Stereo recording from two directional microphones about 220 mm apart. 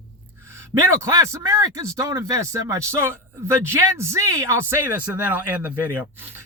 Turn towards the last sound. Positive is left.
turn(degrees=-10)  # may be behind; listen again after turning